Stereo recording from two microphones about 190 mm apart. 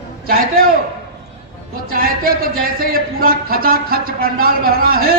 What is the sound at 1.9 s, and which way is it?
Speech, 50° right (ahead or behind).